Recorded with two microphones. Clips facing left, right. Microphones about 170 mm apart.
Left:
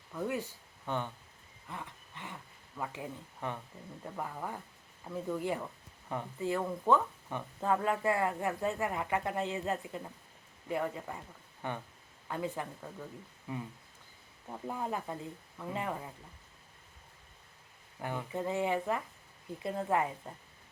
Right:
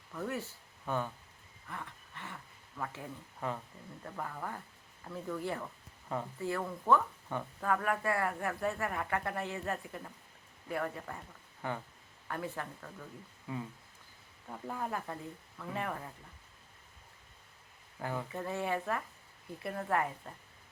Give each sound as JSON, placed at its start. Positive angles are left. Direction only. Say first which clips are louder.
{"t": 0.1, "sound": "speech", "louder": "left 3 dB", "side_deg": 15}
{"t": 14.4, "sound": "speech", "louder": "left 2 dB", "side_deg": 20}
{"t": 18.3, "sound": "speech", "louder": "left 6 dB", "side_deg": 20}